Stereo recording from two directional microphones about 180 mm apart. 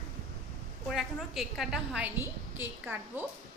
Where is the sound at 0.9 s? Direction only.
Centre (ahead or behind).